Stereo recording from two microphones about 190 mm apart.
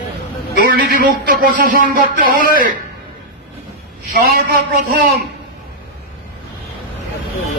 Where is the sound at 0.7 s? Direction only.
50° right (ahead or behind).